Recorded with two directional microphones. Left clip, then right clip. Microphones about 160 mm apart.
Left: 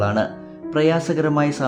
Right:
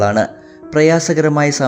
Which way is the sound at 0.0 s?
30° right (ahead or behind).